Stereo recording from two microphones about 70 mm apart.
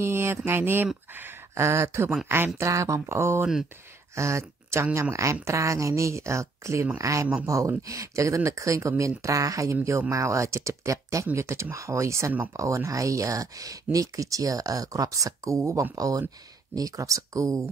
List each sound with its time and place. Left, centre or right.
0.0 s a sound: right
0.5 s speech: right
2.7 s speech: right
15.9 s speech: right